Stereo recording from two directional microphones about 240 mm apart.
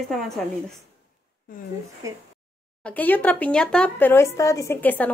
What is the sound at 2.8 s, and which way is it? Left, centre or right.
Speech, centre.